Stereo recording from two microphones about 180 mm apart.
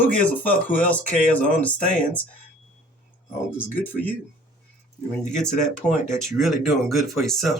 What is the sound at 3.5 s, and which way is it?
Speech, 10° left (ahead or behind).